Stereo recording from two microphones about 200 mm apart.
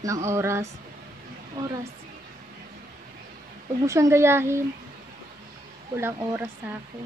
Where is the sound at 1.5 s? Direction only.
25° right (ahead or behind).